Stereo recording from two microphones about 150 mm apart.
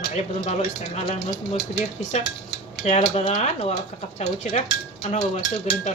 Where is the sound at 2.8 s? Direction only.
45° left (ahead or behind).